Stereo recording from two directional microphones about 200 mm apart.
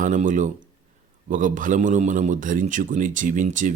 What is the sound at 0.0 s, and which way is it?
Speech, 40° right (ahead or behind).